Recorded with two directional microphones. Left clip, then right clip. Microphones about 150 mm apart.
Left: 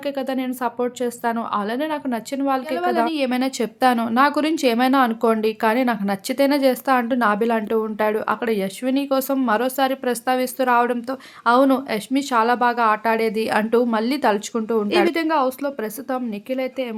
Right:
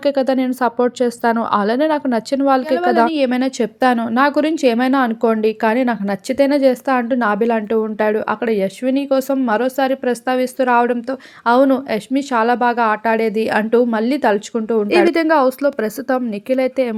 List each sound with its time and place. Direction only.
0.0 s speech: 40° right (ahead or behind); by 14.8 s 15° right (ahead or behind)
14.8 s speech: 25° right (ahead or behind)